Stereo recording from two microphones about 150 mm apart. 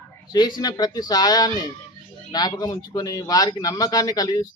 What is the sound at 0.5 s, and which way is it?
A man's voice, 25° left (ahead or behind).